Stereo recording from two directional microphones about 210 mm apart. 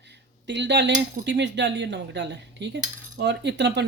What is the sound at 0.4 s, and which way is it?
Speech, 55° right (ahead or behind).